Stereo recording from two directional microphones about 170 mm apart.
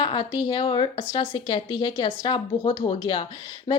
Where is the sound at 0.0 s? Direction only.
30° left (ahead or behind).